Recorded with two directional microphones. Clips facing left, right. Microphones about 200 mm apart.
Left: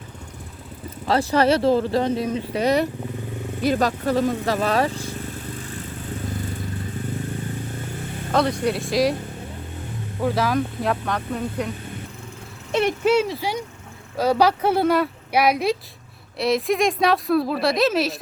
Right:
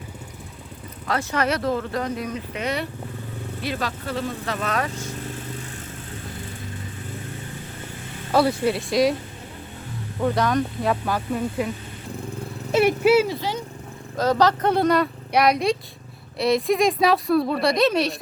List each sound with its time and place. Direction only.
1.0 s speech: 30° left (ahead or behind)
8.3 s speech: 5° right (ahead or behind)
10.2 s speech: 5° left (ahead or behind)
12.7 s speech: 5° right (ahead or behind)
14.2 s speech: 10° left (ahead or behind)